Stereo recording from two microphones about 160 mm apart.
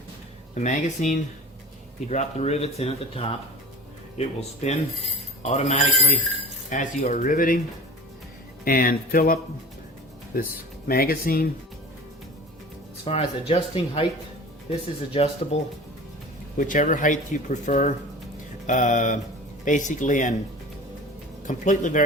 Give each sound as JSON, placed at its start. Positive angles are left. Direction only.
{"t": 0.5, "sound": "speech", "side_deg": 45}
{"t": 8.6, "sound": "speech", "side_deg": 65}
{"t": 10.8, "sound": "speech", "side_deg": 65}
{"t": 13.1, "sound": "speech", "side_deg": 40}
{"t": 16.6, "sound": "speech", "side_deg": 55}
{"t": 21.4, "sound": "speech", "side_deg": 50}